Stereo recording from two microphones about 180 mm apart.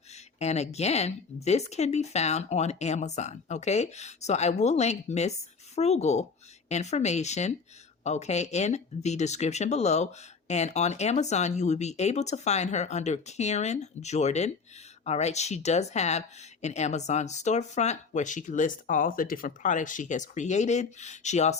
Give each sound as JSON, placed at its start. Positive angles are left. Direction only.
{"t": 0.3, "sound": "a woman's voice", "side_deg": 35}